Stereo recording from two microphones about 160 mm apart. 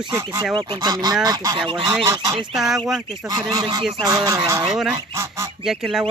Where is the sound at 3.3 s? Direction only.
25° right (ahead or behind).